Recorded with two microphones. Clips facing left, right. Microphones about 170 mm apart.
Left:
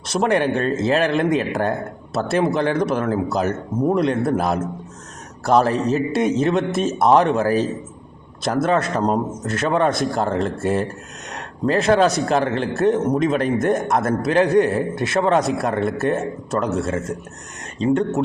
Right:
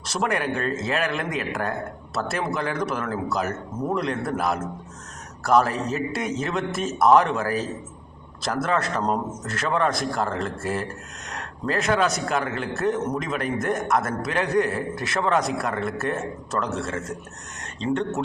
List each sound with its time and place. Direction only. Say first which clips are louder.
0.1 s a man's voice: left 7 dB; 30° left (ahead or behind)
17.7 s speech: left 7 dB; 10° left (ahead or behind)